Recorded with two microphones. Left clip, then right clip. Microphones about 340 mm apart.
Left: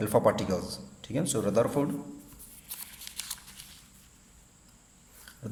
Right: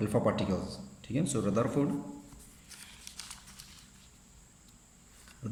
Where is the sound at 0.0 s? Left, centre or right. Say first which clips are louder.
Left 5 dB; centre.